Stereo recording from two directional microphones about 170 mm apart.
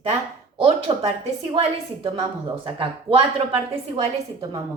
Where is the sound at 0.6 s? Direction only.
35° right (ahead or behind).